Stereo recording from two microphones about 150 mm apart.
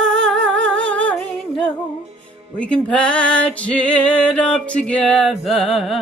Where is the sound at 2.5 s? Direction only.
10° left (ahead or behind).